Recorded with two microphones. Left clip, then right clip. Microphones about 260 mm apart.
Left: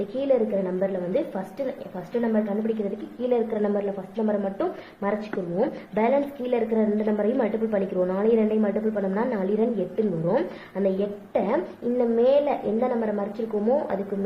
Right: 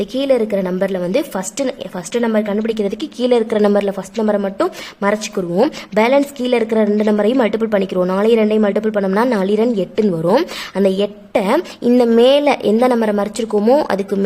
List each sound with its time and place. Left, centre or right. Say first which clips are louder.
0.2 s a woman's voice: right 7 dB; right